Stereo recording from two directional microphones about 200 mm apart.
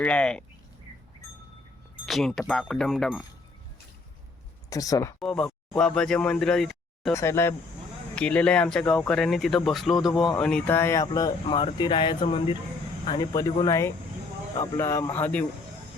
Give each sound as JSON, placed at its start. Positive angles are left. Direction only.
{"t": 0.0, "sound": "speech", "side_deg": 5}
{"t": 2.0, "sound": "speech", "side_deg": 0}
{"t": 4.7, "sound": "speech", "side_deg": 15}
{"t": 5.2, "sound": "speech", "side_deg": 5}
{"t": 7.1, "sound": "speech", "side_deg": 15}